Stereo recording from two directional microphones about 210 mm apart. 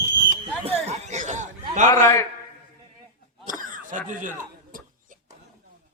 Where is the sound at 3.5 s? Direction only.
40° right (ahead or behind).